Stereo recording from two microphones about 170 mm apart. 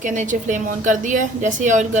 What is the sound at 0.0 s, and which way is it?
A woman's voice, 50° right (ahead or behind).